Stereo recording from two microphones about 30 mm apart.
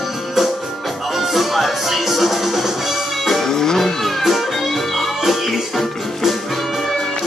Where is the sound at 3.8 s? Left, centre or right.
Centre.